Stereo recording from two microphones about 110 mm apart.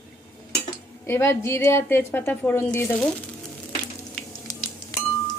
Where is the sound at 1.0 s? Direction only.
20° left (ahead or behind).